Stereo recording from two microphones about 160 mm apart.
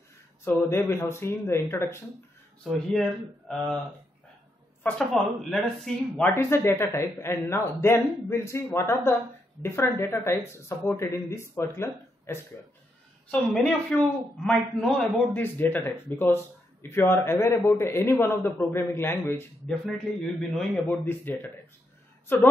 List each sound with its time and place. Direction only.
0.5 s a man's voice: 15° left (ahead or behind)
2.6 s a man's voice: centre (ahead or behind)
4.8 s a man's voice: 5° left (ahead or behind)
6.1 s a man's voice: 15° left (ahead or behind)
13.3 s a man's voice: 5° left (ahead or behind)
20.2 s a man's voice: 5° left (ahead or behind)